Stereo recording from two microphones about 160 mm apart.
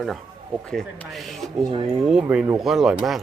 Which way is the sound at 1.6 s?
25° right (ahead or behind).